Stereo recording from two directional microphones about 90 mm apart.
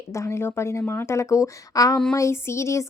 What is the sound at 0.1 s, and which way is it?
A woman's voice, 30° left (ahead or behind).